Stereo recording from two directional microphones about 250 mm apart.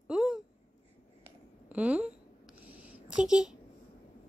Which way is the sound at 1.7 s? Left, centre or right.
Centre.